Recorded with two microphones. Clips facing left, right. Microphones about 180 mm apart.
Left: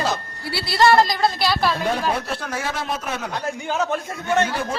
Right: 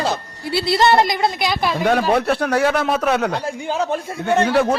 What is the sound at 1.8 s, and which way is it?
A man's voice, 70° right (ahead or behind).